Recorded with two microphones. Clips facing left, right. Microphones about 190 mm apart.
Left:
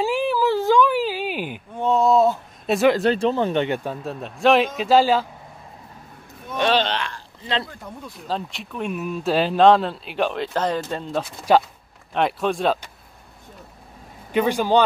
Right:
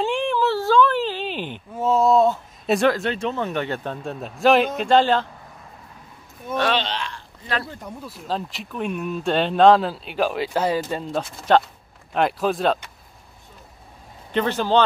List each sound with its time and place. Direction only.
0.0 s a sound: 5° left (ahead or behind)
1.8 s speech: centre (ahead or behind)
3.0 s speech: 35° left (ahead or behind)
3.6 s speech: 15° left (ahead or behind)
3.9 s speech: centre (ahead or behind)
6.8 s a sound: 60° left (ahead or behind)
7.8 s speech: centre (ahead or behind)
14.3 s speech: 10° left (ahead or behind)